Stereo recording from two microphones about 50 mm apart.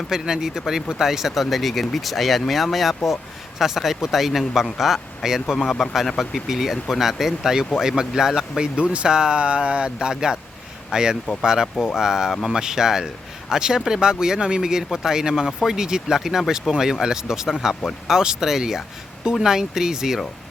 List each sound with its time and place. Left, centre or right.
0.1 s speech: centre